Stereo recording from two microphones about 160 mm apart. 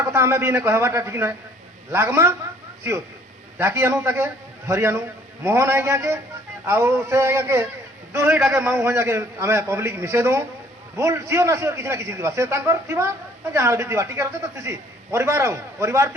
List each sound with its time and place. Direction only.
0.0 s a man's voice: 15° right (ahead or behind)
3.6 s a man's voice: 15° right (ahead or behind)